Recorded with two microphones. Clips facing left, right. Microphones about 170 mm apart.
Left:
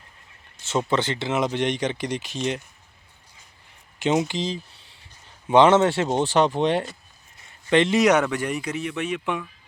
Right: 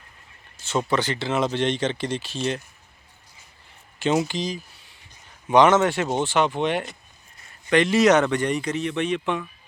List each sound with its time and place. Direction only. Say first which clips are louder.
0.6 s speech: even; 25° left (ahead or behind)
4.0 s speech: even; 20° left (ahead or behind)